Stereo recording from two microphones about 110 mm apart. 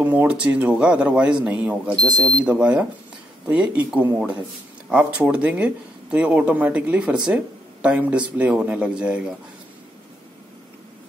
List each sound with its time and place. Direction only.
0.0 s a man's voice: 15° right (ahead or behind)
2.0 s speech: 40° right (ahead or behind)
2.4 s a man's voice: 10° right (ahead or behind)